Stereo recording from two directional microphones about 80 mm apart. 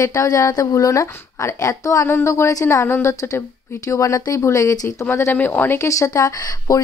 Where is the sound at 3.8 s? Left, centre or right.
Left.